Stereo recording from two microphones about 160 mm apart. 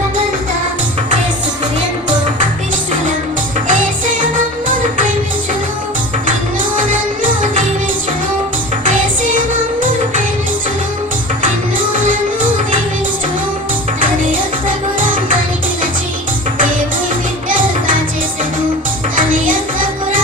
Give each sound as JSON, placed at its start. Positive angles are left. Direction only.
{"t": 3.7, "sound": "music", "side_deg": -55}
{"t": 6.7, "sound": "music", "side_deg": -55}
{"t": 8.8, "sound": "music", "side_deg": -55}
{"t": 11.9, "sound": "music", "side_deg": -55}
{"t": 15.0, "sound": "music", "side_deg": -60}
{"t": 17.5, "sound": "music", "side_deg": -55}
{"t": 19.1, "sound": "music", "side_deg": -55}